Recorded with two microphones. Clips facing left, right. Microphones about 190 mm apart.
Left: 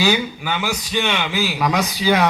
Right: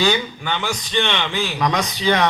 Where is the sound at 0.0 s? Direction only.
5° left (ahead or behind).